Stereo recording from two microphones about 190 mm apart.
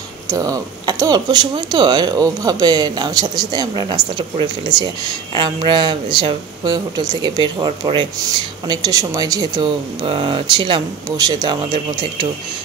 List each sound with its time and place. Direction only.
0.3 s speech: 20° right (ahead or behind)